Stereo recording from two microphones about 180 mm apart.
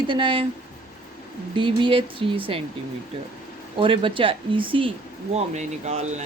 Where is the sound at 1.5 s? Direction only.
25° right (ahead or behind).